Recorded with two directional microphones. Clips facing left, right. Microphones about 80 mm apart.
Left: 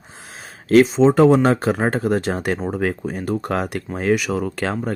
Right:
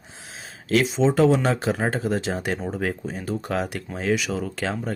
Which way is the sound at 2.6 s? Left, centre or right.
Left.